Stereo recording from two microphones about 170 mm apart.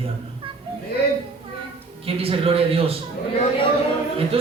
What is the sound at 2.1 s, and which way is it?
Speech, 35° right (ahead or behind).